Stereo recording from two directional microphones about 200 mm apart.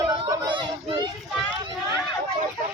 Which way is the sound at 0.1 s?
20° right (ahead or behind).